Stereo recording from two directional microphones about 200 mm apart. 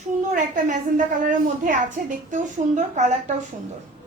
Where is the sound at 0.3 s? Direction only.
40° right (ahead or behind).